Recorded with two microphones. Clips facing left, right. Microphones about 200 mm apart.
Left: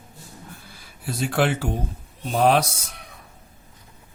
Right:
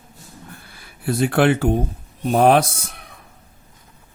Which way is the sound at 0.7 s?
60° right (ahead or behind).